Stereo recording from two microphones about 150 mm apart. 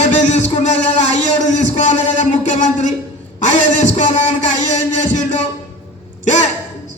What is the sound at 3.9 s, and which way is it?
A man's voice, 50° left (ahead or behind).